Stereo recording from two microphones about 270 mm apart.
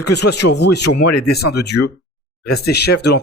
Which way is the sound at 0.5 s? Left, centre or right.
Left.